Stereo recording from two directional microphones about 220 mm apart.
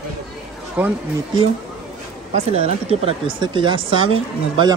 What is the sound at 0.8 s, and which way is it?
Speech, 5° right (ahead or behind).